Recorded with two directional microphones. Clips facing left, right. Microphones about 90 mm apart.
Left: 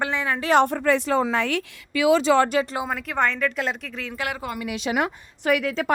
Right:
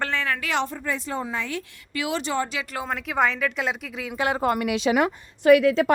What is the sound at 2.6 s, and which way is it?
Speech, 40° left (ahead or behind).